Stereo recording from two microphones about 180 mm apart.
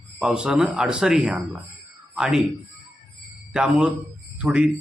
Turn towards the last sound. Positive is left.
turn(degrees=-5)  # may be behind; listen again after turning